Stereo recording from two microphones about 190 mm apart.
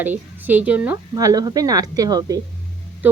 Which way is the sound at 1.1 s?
20° right (ahead or behind).